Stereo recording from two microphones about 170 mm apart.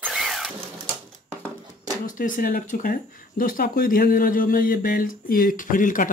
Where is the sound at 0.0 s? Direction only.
Centre (ahead or behind).